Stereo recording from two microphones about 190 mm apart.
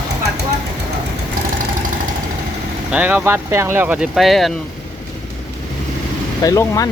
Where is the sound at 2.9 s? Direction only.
10° right (ahead or behind).